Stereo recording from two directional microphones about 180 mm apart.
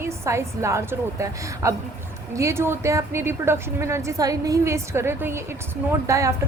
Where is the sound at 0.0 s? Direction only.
15° right (ahead or behind).